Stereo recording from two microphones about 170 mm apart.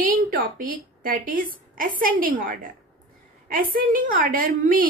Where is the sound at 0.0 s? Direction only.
55° right (ahead or behind).